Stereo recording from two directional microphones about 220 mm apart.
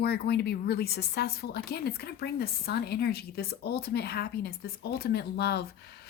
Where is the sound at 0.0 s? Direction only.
45° left (ahead or behind).